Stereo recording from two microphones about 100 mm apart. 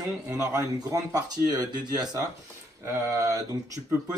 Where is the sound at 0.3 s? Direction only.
35° right (ahead or behind).